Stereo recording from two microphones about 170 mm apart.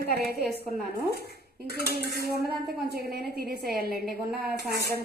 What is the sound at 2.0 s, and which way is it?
Dishes, 65° right (ahead or behind).